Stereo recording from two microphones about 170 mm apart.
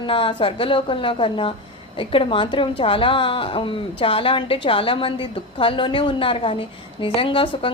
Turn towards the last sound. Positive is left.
turn(degrees=30)  # may be behind; listen again after turning